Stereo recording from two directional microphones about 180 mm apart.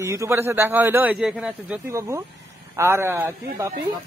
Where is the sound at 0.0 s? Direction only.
15° right (ahead or behind).